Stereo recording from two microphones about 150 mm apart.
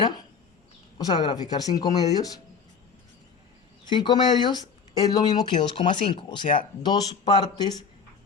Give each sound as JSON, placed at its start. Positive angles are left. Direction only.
{"t": 0.9, "sound": "speech", "side_deg": 30}
{"t": 3.8, "sound": "speech", "side_deg": 30}